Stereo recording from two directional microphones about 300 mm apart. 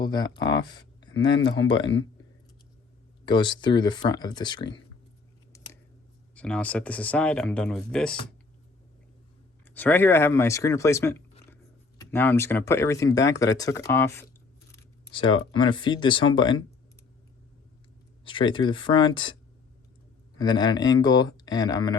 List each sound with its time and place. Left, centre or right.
0.0 s speech: centre
3.2 s speech: centre
6.3 s speech: centre
9.6 s speech: centre
14.7 s a sound: centre
15.5 s speech: centre
18.3 s speech: centre
20.4 s speech: centre